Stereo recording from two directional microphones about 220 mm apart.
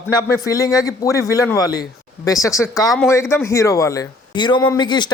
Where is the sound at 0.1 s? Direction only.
15° left (ahead or behind).